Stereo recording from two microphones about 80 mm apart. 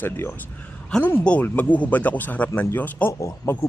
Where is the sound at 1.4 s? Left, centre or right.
Left.